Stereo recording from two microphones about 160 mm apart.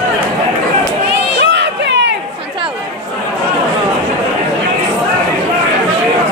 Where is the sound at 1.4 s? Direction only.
90° right.